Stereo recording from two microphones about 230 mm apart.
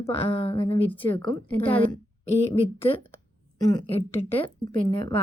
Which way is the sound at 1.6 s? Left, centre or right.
Left.